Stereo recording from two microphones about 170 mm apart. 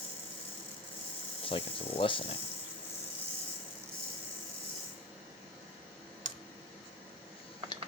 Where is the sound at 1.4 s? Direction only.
30° left (ahead or behind).